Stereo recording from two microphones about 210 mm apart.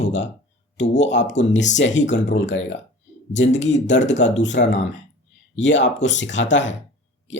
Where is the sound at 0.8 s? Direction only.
60° left (ahead or behind).